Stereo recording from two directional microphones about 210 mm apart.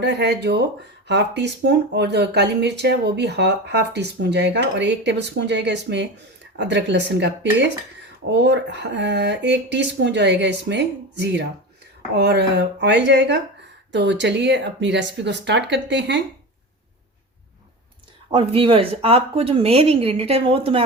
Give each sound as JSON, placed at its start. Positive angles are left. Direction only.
{"t": 0.0, "sound": "speech", "side_deg": -55}
{"t": 18.3, "sound": "speech", "side_deg": -25}